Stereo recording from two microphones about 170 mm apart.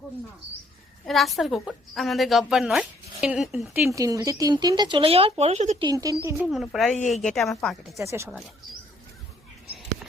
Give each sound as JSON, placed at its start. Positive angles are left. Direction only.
{"t": 1.0, "sound": "a woman's voice", "side_deg": 0}
{"t": 3.8, "sound": "speech", "side_deg": -20}
{"t": 5.8, "sound": "speech", "side_deg": -20}
{"t": 6.7, "sound": "a woman's voice", "side_deg": -5}
{"t": 7.9, "sound": "speech", "side_deg": -15}